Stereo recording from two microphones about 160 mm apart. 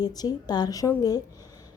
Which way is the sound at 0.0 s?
25° left (ahead or behind).